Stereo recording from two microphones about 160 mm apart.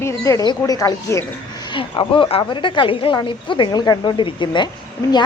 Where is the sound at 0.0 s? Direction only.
20° left (ahead or behind).